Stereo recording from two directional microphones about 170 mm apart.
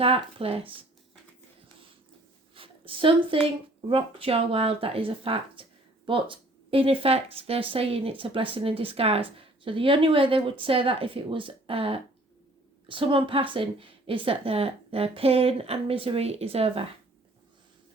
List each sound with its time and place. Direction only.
0.0 s a woman's voice: 35° right (ahead or behind)
2.6 s a woman's voice: 30° right (ahead or behind)